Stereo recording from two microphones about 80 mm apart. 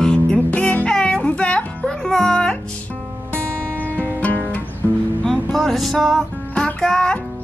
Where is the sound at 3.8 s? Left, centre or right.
Right.